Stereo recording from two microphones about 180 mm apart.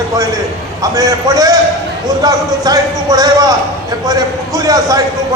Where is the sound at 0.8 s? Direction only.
20° right (ahead or behind).